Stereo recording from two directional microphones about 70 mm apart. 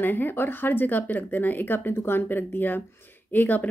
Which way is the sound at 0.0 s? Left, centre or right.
Left.